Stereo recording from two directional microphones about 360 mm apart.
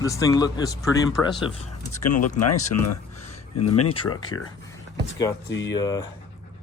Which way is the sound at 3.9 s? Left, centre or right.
Centre.